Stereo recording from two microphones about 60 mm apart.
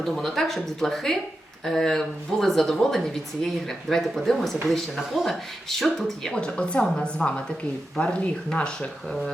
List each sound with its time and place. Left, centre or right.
0.0 s speech: centre